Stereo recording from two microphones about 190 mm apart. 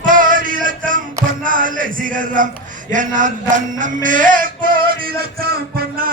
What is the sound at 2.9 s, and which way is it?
Speech, 40° right (ahead or behind).